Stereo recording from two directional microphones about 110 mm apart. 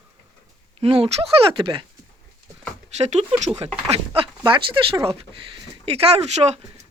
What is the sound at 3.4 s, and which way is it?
Speech, 60° right (ahead or behind).